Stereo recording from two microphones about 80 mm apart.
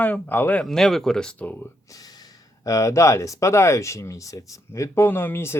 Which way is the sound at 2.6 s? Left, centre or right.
Left.